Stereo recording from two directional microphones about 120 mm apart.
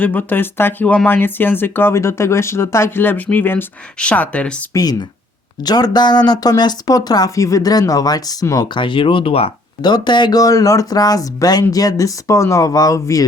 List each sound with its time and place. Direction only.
0.0 s speech: 15° left (ahead or behind)
4.7 s speech: 30° left (ahead or behind)
8.7 s speech: 45° left (ahead or behind)
9.8 s speech: 40° left (ahead or behind)